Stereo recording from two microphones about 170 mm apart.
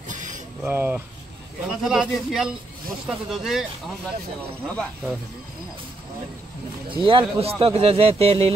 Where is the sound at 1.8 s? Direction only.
5° right (ahead or behind).